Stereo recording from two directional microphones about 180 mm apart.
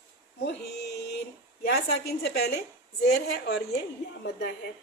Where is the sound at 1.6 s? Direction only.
60° left (ahead or behind).